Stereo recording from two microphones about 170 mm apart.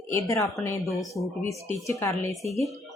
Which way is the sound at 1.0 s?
Centre (ahead or behind).